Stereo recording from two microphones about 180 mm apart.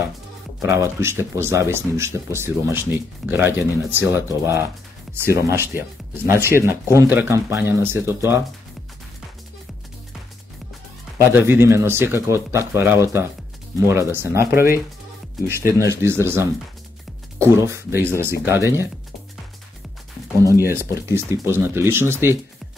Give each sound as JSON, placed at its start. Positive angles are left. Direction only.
{"t": 0.6, "sound": "speech", "side_deg": -15}
{"t": 11.3, "sound": "speech", "side_deg": -10}
{"t": 20.6, "sound": "speech", "side_deg": -15}